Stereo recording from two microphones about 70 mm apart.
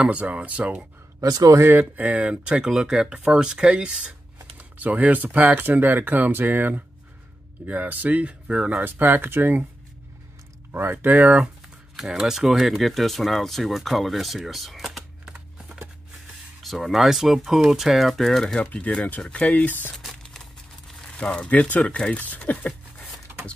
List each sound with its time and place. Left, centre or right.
0.0 s speech: centre
1.2 s speech: right
1.7 s speech: right
4.6 s speech: right
8.8 s speech: right
10.7 s speech: right
12.0 s speech: centre
14.9 s computer keyboard: centre
16.6 s speech: centre
18.6 s speech: centre
20.0 s a sound: centre
21.1 s speech: centre
22.7 s a sound: centre